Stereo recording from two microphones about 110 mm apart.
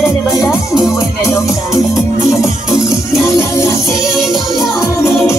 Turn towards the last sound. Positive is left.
turn(degrees=25)  # may be behind; listen again after turning